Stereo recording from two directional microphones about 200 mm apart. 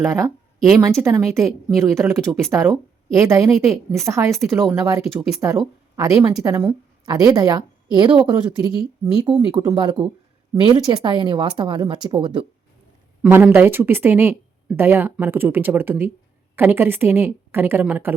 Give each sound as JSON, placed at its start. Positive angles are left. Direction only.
{"t": 0.1, "sound": "speech", "side_deg": -15}
{"t": 4.5, "sound": "speech", "side_deg": 0}
{"t": 4.8, "sound": "a woman's voice", "side_deg": -15}
{"t": 13.2, "sound": "speech", "side_deg": -10}